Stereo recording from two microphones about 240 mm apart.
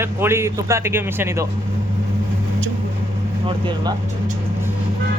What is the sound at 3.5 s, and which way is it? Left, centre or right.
Speech, centre.